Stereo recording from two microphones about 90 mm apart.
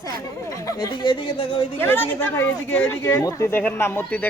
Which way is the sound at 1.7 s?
25° left (ahead or behind).